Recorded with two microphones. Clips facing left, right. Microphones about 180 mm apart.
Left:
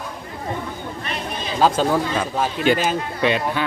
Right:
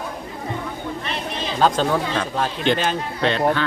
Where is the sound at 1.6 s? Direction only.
5° left (ahead or behind).